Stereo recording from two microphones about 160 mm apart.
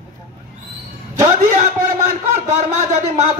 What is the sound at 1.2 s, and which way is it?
Speech, 50° right (ahead or behind).